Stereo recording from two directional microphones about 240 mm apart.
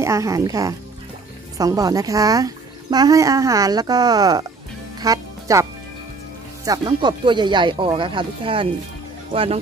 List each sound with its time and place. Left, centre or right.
0.0 s speech: centre